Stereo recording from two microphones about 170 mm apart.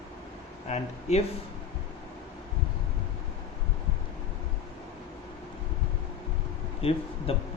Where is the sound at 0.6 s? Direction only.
40° left (ahead or behind).